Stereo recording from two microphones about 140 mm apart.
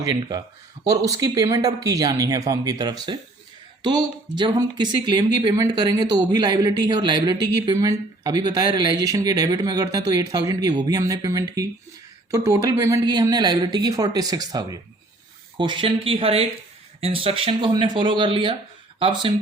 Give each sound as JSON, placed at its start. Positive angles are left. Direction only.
{"t": 0.1, "sound": "speech", "side_deg": -30}